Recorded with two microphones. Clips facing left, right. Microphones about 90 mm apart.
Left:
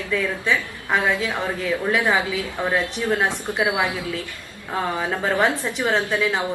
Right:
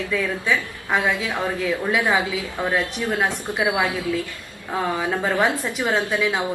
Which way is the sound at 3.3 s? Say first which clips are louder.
Even; 20° left (ahead or behind).